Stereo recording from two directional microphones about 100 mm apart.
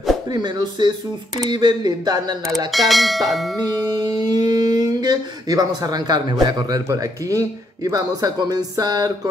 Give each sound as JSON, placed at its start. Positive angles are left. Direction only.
{"t": 0.3, "sound": "speech", "side_deg": -45}
{"t": 2.7, "sound": "bell", "side_deg": 0}
{"t": 4.0, "sound": "speech", "side_deg": -45}